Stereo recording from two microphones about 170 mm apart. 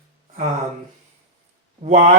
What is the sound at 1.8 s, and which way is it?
Speech, 40° right (ahead or behind).